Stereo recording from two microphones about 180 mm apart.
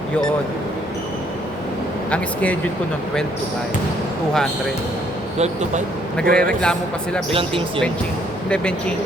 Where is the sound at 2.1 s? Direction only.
5° left (ahead or behind).